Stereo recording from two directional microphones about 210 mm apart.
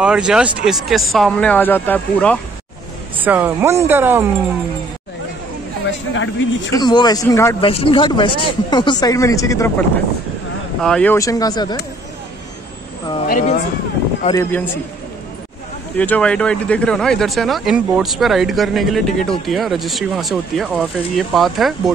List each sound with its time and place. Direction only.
0.0 s speech: 5° right (ahead or behind)
3.2 s speech: 10° right (ahead or behind)
5.9 s speech: 60° left (ahead or behind)
6.7 s speech: 20° left (ahead or behind)
7.6 s speech: 25° left (ahead or behind)
13.3 s speech: 35° left (ahead or behind)
14.3 s speech: 10° left (ahead or behind)
16.0 s speech: 5° left (ahead or behind)